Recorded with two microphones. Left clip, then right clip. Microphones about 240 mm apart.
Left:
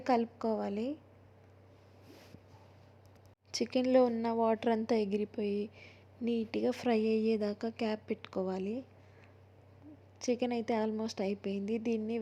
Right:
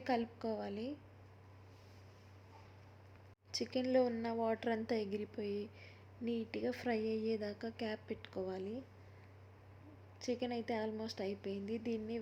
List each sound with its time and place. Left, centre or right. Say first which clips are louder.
0.0 s a woman's voice: left 7 dB; centre
3.5 s a woman's voice: left 6 dB; centre
10.2 s a woman's voice: left 7 dB; centre